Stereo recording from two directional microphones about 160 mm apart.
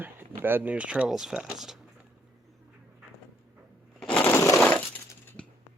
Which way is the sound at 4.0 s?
10° left (ahead or behind).